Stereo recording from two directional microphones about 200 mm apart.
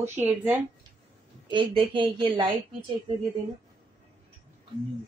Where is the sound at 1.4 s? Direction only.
25° right (ahead or behind).